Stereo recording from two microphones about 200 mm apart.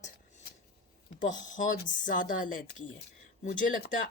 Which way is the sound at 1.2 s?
65° left (ahead or behind).